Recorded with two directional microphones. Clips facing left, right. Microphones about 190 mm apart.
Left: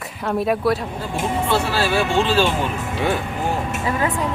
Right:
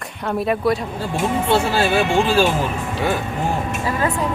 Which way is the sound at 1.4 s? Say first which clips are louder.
Right 3 dB; 25° right (ahead or behind).